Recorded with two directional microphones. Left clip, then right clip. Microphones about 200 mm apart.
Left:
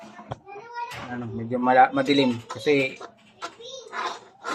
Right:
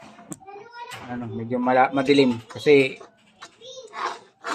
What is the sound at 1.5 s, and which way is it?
Speech, 25° right (ahead or behind).